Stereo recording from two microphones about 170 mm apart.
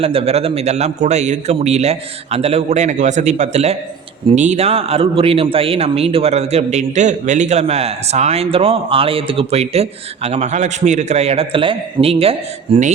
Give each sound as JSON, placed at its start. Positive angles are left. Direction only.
{"t": 0.0, "sound": "speech", "side_deg": -35}